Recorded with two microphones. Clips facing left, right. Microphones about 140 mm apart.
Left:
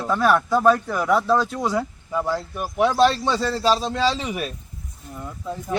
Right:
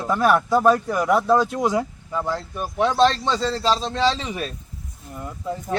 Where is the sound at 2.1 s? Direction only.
10° left (ahead or behind).